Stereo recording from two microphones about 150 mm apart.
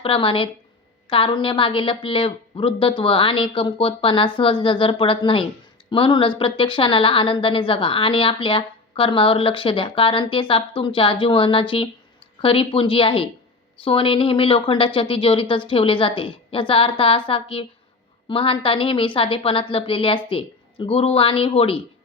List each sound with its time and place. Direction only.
0.0 s a woman's voice: 35° left (ahead or behind)